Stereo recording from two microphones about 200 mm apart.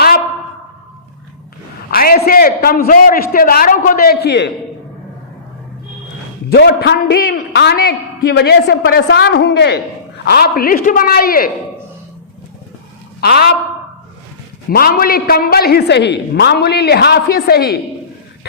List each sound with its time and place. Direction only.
1.9 s a woman's voice: 45° left (ahead or behind)
6.5 s a man's voice: 55° left (ahead or behind)
13.2 s a woman's voice: 50° left (ahead or behind)
14.7 s a woman's voice: 45° left (ahead or behind)